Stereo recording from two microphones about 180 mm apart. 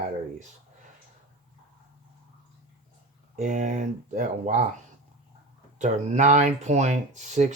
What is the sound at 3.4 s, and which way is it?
Speech, 45° right (ahead or behind).